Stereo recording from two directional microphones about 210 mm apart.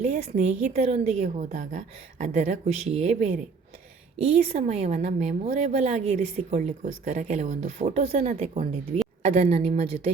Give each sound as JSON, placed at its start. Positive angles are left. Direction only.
{"t": 0.0, "sound": "a woman's voice", "side_deg": -35}